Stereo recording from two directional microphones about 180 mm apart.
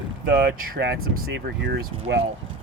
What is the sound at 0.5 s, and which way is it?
Speech, 55° right (ahead or behind).